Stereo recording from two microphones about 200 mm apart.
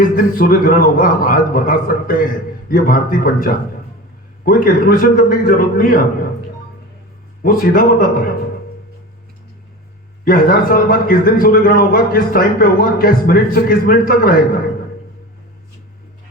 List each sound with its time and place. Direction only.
0.0 s a man's voice: 45° left (ahead or behind)
7.4 s a man's voice: 45° left (ahead or behind)
10.2 s a man's voice: 45° left (ahead or behind)